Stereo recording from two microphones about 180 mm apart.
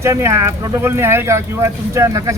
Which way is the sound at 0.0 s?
15° right (ahead or behind).